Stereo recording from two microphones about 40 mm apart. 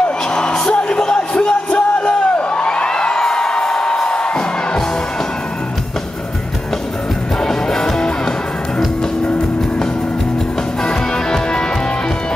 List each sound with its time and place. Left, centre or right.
0.3 s music: centre
7.3 s music: centre
10.8 s music: centre